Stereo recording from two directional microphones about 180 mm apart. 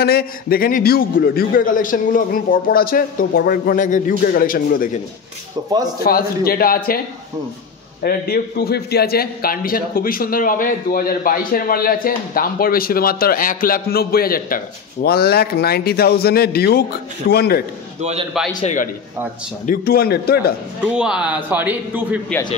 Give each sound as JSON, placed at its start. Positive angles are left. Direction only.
{"t": 0.0, "sound": "a man's voice", "side_deg": 60}
{"t": 6.0, "sound": "a man's voice", "side_deg": 55}
{"t": 8.0, "sound": "a man's voice", "side_deg": 55}
{"t": 18.4, "sound": "a man's voice", "side_deg": 0}
{"t": 19.6, "sound": "a man's voice", "side_deg": 55}
{"t": 20.9, "sound": "a man's voice", "side_deg": -5}